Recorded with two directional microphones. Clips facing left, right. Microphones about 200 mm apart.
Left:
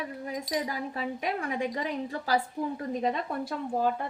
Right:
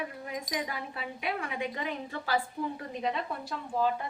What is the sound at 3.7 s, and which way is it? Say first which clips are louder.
Speech: left 1 dB; 50° left (ahead or behind).